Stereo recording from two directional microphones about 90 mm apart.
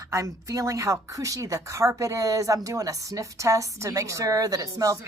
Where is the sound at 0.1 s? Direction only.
35° right (ahead or behind).